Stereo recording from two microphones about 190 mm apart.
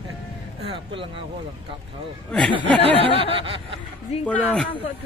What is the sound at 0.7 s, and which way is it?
Speech, 25° right (ahead or behind).